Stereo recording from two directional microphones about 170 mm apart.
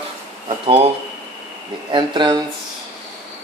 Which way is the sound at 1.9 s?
25° right (ahead or behind).